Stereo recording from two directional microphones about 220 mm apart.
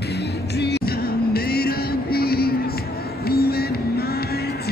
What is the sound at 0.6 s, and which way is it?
Music, 45° left (ahead or behind).